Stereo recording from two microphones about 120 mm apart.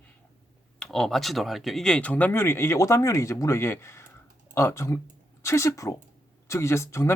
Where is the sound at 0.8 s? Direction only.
5° left (ahead or behind).